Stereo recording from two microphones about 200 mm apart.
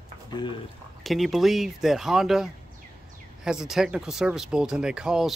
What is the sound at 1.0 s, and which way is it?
Speech, centre (ahead or behind).